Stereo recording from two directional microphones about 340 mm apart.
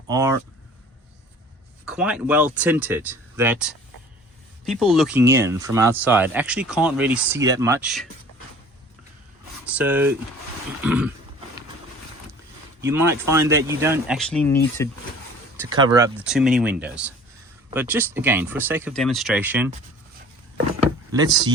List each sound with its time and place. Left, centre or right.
0.1 s speech: centre
1.8 s speech: centre
9.6 s speech: centre
12.8 s speech: centre
15.5 s speech: centre
21.1 s speech: centre